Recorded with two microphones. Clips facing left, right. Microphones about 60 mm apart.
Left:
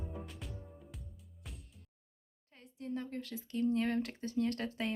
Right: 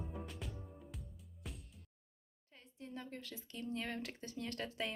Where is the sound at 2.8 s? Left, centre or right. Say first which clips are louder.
Left 8 dB; left.